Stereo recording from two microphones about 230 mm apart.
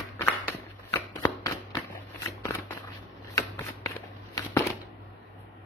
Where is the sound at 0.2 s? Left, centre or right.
Centre.